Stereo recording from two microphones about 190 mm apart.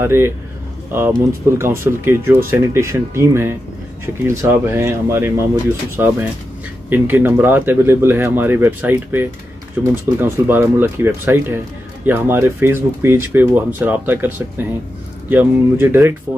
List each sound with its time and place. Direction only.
0.0 s speech: 15° right (ahead or behind)
1.6 s speech: 15° right (ahead or behind)